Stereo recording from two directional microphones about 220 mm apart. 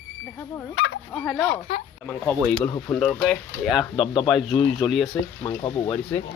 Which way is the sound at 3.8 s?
20° left (ahead or behind).